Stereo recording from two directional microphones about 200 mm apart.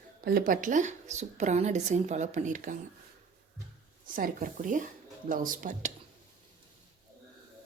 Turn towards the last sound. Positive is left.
turn(degrees=-40)  # may be behind; listen again after turning